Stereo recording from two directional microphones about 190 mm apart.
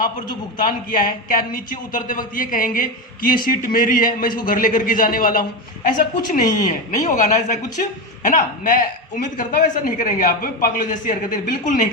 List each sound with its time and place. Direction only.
0.6 s a man's voice: 45° left (ahead or behind)